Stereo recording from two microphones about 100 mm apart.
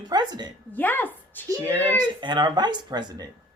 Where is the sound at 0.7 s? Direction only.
20° left (ahead or behind).